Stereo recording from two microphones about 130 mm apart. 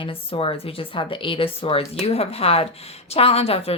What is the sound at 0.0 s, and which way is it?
A woman's voice, 45° left (ahead or behind).